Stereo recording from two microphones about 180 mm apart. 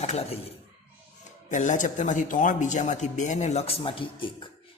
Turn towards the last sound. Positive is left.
turn(degrees=30)  # may be behind; listen again after turning